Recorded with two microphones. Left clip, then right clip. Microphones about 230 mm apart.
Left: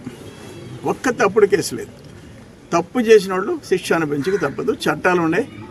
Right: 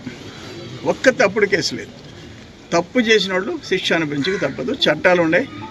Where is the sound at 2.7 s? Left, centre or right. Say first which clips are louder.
Left 2 dB; centre.